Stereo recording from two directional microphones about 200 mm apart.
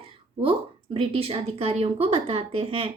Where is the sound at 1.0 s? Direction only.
30° right (ahead or behind).